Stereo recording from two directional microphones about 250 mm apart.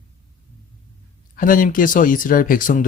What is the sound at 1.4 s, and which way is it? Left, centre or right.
Speech, left.